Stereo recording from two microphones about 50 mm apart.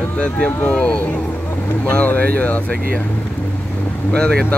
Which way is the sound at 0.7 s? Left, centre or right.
Left.